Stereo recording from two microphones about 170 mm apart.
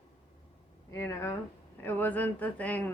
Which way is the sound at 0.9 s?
15° left (ahead or behind).